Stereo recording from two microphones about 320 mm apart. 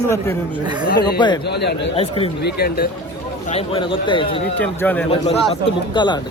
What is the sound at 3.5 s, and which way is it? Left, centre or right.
Speech, centre.